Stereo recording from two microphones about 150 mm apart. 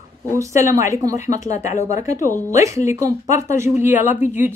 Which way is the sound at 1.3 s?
50° left (ahead or behind).